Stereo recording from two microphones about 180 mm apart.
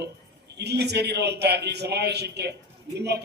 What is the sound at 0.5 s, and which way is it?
A man's voice, 65° right (ahead or behind).